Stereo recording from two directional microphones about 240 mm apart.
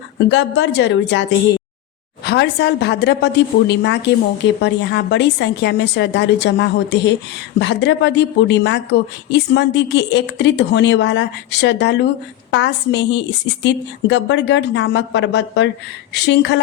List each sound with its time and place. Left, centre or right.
0.3 s a woman's voice: left
2.2 s a woman's voice: left